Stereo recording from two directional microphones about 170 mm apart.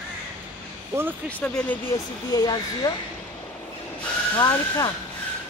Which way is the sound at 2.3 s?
25° left (ahead or behind).